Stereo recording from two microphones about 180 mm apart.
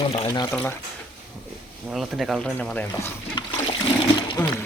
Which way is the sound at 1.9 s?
Centre (ahead or behind).